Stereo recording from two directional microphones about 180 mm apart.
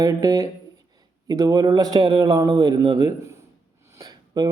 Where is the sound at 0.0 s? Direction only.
20° right (ahead or behind).